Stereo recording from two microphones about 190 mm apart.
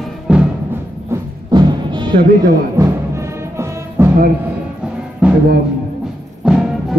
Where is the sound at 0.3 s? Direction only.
5° right (ahead or behind).